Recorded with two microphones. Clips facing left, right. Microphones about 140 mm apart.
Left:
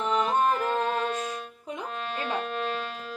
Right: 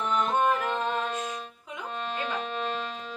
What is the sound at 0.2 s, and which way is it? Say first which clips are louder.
Music: even; 5° left (ahead or behind).